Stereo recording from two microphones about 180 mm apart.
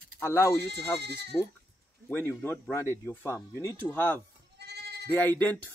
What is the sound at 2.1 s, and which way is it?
Speech, 10° left (ahead or behind).